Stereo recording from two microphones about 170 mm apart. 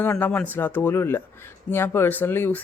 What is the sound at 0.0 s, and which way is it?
Speech, 10° left (ahead or behind).